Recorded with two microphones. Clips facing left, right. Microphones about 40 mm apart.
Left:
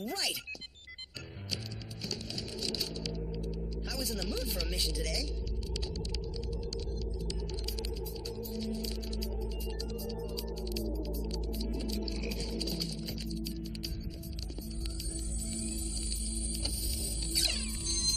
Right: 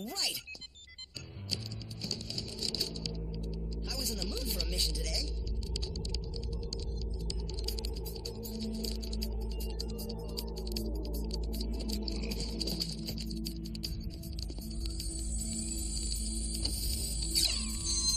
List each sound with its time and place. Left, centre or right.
2.6 s music: centre
3.5 s speech: centre
8.4 s music: centre
17.3 s music: centre